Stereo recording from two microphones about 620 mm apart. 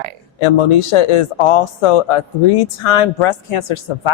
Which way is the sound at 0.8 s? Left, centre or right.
Left.